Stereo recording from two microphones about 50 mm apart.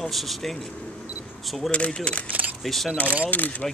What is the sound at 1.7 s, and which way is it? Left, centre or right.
Speech, left.